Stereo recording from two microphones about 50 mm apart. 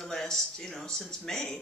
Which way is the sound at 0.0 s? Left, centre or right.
Centre.